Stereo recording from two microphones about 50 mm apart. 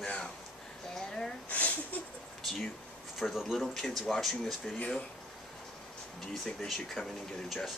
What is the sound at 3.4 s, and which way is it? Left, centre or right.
Speech, centre.